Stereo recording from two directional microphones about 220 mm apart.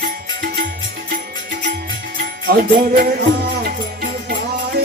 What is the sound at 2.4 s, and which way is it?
Music, 40° right (ahead or behind).